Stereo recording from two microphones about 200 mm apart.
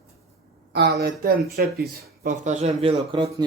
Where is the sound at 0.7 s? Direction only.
55° right (ahead or behind).